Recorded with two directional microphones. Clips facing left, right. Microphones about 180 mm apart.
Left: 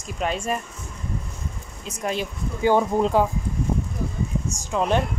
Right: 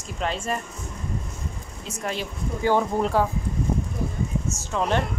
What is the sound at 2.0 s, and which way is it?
Speech, 15° left (ahead or behind).